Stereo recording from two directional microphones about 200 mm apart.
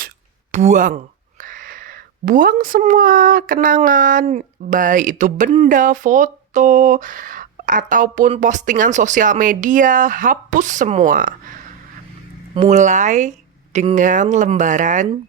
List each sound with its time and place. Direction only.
0.5 s speech: 35° right (ahead or behind)
12.5 s speech: 35° right (ahead or behind)